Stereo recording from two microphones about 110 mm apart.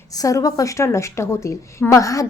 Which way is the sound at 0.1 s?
30° left (ahead or behind).